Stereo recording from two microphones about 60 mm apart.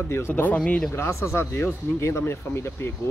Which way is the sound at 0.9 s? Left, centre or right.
Left.